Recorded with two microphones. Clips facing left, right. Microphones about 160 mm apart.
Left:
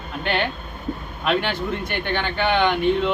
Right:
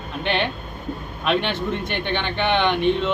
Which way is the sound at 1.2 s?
5° left (ahead or behind).